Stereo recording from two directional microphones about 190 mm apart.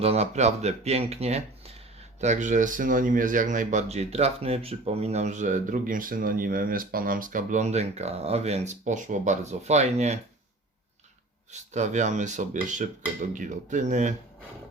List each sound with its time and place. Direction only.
0.0 s speech: 35° right (ahead or behind)
11.5 s speech: 40° right (ahead or behind)